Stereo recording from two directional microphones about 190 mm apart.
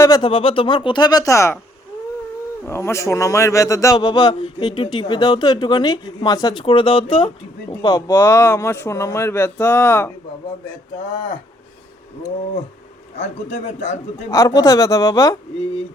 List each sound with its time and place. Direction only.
0.0 s speech: 20° left (ahead or behind)
2.6 s speech: 15° left (ahead or behind)
13.1 s a man's voice: 35° left (ahead or behind)
14.3 s speech: 20° left (ahead or behind)